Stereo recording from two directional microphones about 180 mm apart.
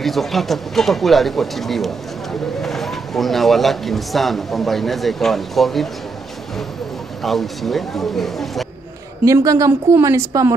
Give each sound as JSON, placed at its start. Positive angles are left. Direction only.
{"t": 0.0, "sound": "speech", "side_deg": 0}
{"t": 7.2, "sound": "speech", "side_deg": 0}
{"t": 9.2, "sound": "a woman's voice", "side_deg": -20}